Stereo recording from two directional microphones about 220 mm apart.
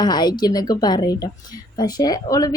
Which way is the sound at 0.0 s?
20° left (ahead or behind).